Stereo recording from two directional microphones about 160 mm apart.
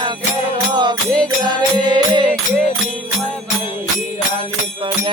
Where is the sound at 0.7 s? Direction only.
25° right (ahead or behind).